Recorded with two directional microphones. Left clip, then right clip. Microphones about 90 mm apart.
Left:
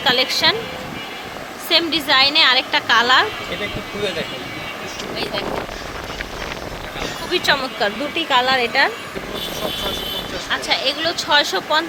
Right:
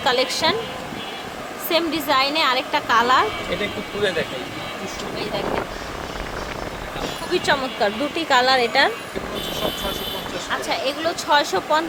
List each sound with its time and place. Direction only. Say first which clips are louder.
0.0 s a woman's voice: left 3 dB; 20° right (ahead or behind)
1.7 s a woman's voice: left 4 dB; centre (ahead or behind)
7.3 s a woman's voice: left 2 dB; 5° right (ahead or behind)
8.1 s a woman's voice: left 1 dB; 25° right (ahead or behind)
10.5 s speech: left 4 dB; 10° right (ahead or behind)